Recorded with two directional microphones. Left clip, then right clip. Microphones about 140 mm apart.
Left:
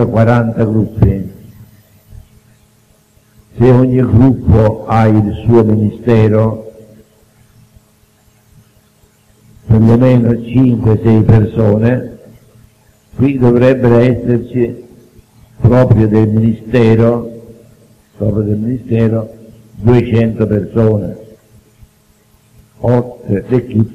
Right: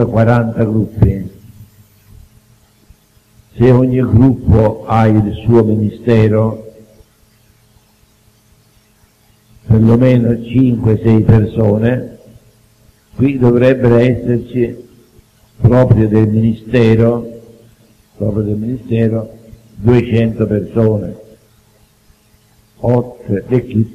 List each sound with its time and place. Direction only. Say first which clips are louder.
0.1 s a man's voice: left 1 dB; 40° right (ahead or behind)
3.5 s a man's voice: left 1 dB; 40° right (ahead or behind)
9.8 s a man's voice: left 1 dB; 35° right (ahead or behind)
13.2 s a man's voice: left 1 dB; 40° right (ahead or behind)
22.8 s a man's voice: left 1 dB; 40° right (ahead or behind)